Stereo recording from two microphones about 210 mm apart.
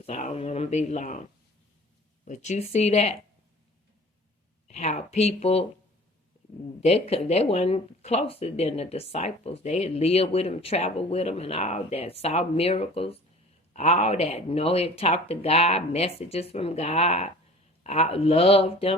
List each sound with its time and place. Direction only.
0.0 s speech: 30° left (ahead or behind)
4.7 s speech: 35° left (ahead or behind)
6.8 s speech: 30° left (ahead or behind)